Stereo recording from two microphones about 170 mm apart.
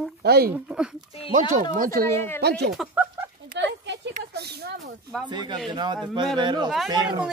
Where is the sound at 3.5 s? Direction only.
90° right.